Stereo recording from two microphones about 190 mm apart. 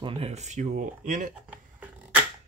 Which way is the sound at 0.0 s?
30° right (ahead or behind).